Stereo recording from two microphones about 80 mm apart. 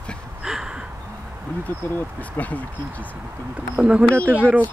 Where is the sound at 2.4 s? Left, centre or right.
Centre.